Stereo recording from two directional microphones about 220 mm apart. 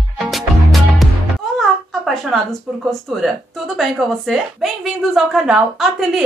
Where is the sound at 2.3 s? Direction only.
Centre (ahead or behind).